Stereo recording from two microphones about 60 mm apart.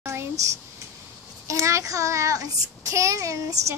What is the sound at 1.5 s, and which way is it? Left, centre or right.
A child's voice, right.